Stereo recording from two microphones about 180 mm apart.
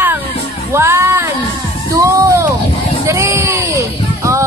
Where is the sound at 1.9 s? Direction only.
20° right (ahead or behind).